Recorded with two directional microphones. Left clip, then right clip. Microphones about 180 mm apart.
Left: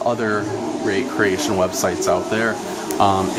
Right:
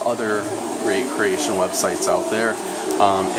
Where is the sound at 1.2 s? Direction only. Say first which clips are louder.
Left 4 dB; 20° left (ahead or behind).